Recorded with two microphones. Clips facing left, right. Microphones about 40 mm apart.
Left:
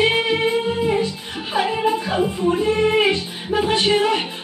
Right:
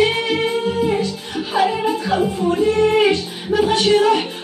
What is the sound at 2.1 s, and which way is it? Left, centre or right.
Speech, centre.